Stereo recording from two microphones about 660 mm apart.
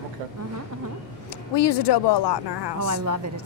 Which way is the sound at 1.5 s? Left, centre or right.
Left.